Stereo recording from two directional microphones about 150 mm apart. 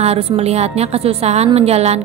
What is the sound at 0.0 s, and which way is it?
A woman's voice, 40° right (ahead or behind).